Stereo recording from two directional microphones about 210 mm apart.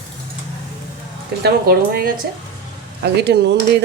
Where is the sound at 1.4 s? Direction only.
45° right (ahead or behind).